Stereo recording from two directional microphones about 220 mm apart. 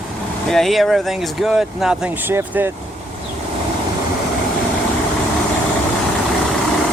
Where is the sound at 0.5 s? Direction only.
Centre (ahead or behind).